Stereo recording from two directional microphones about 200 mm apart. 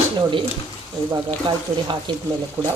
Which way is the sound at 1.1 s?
25° right (ahead or behind).